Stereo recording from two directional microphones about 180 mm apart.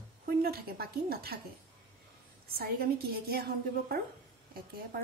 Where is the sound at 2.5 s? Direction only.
60° right (ahead or behind).